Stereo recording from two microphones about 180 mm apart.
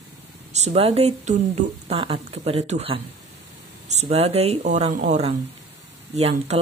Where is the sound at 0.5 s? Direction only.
35° right (ahead or behind).